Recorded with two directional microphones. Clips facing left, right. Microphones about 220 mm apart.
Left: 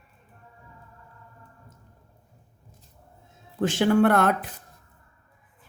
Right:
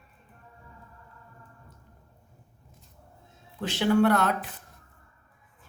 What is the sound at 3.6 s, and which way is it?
Speech, 50° left (ahead or behind).